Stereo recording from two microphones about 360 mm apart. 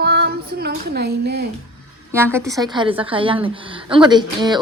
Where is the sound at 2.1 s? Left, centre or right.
Centre.